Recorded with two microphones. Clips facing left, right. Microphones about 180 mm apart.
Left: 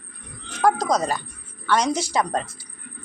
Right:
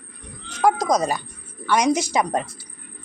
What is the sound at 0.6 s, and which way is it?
A woman's voice, 15° right (ahead or behind).